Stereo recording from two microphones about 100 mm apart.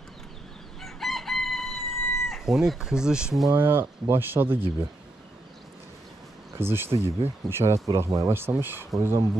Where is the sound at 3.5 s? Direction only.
25° right (ahead or behind).